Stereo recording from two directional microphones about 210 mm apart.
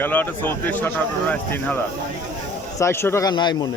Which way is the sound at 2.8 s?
10° left (ahead or behind).